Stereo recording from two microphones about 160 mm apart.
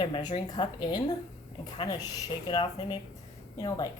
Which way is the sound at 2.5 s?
25° left (ahead or behind).